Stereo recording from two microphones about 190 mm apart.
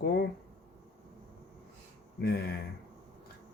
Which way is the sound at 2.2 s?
55° left (ahead or behind).